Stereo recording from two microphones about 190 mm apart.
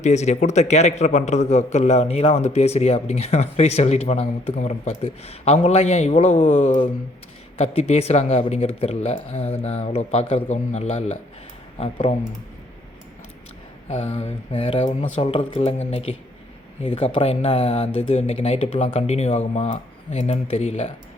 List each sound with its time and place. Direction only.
0.0 s a man's voice: 35° left (ahead or behind)
13.8 s a man's voice: 35° left (ahead or behind)